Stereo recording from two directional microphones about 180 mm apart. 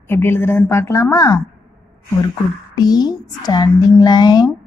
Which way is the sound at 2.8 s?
20° left (ahead or behind).